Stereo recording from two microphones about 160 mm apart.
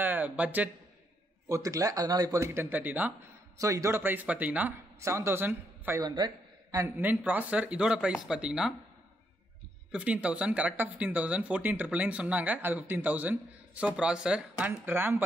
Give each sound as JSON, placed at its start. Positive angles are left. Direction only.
{"t": 0.0, "sound": "speech", "side_deg": -10}
{"t": 1.5, "sound": "speech", "side_deg": -20}
{"t": 7.0, "sound": "speech", "side_deg": -10}
{"t": 9.9, "sound": "speech", "side_deg": -10}